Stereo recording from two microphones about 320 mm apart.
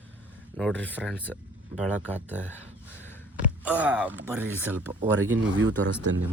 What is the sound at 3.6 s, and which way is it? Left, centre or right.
Speech, centre.